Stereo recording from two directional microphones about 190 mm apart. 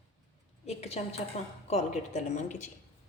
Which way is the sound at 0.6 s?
35° left (ahead or behind).